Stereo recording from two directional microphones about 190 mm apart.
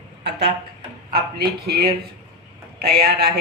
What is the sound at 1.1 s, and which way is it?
A man's voice, 55° right (ahead or behind).